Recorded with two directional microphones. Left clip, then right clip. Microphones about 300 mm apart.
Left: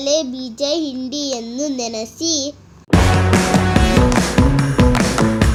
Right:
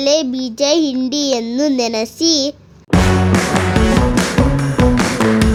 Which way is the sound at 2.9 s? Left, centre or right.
Centre.